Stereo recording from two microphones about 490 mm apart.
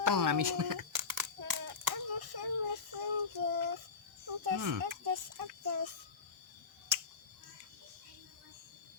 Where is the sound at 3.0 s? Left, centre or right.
Right.